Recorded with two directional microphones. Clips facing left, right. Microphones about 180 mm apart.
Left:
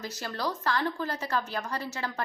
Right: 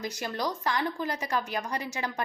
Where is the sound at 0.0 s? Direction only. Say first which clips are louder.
Right 2 dB; 15° right (ahead or behind).